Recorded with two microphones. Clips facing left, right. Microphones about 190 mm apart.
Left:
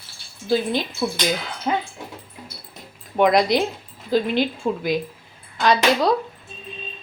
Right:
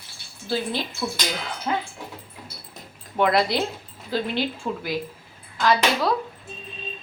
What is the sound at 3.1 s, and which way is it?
A woman's voice, 15° left (ahead or behind).